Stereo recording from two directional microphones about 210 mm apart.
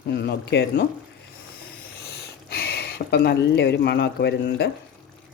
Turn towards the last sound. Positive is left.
turn(degrees=50)  # may be behind; listen again after turning